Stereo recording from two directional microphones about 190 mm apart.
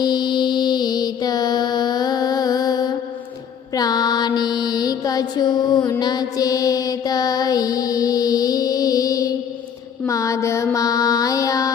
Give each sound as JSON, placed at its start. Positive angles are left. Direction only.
{"t": 0.0, "sound": "mantra", "side_deg": 20}